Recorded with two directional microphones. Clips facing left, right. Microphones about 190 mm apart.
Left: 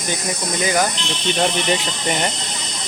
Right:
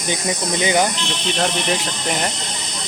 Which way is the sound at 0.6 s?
20° right (ahead or behind).